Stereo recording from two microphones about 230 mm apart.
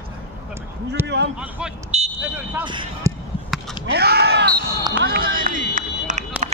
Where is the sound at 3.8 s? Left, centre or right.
Right.